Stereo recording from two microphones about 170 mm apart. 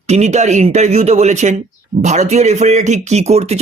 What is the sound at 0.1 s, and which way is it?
A man's voice, 40° right (ahead or behind).